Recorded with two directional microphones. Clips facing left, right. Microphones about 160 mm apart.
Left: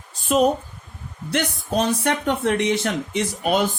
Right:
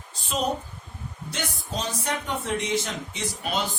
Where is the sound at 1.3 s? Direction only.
60° left (ahead or behind).